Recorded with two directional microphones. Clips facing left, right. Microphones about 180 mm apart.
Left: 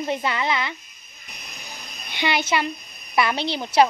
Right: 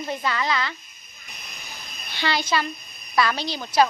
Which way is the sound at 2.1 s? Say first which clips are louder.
Left 2 dB; 20° left (ahead or behind).